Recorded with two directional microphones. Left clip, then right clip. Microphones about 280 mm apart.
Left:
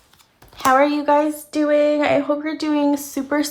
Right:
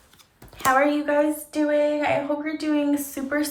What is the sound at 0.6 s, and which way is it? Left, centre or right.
Speech, centre.